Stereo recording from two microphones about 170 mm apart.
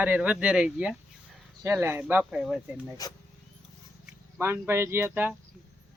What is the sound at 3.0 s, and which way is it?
Speech, 20° left (ahead or behind).